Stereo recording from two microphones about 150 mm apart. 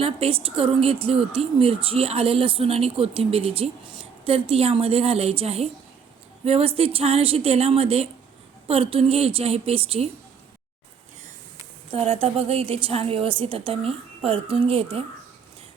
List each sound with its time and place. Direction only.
0.0 s a woman's voice: 40° right (ahead or behind)
11.9 s a woman's voice: 40° right (ahead or behind)